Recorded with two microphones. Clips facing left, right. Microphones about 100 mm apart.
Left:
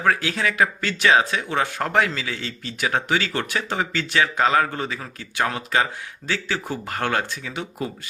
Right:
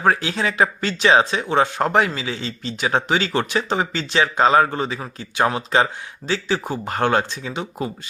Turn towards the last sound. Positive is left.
turn(degrees=-20)  # may be behind; listen again after turning